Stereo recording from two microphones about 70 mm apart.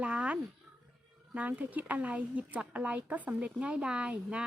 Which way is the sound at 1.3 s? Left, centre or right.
Right.